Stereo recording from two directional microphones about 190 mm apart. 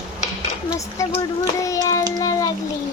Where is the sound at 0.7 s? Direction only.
15° left (ahead or behind).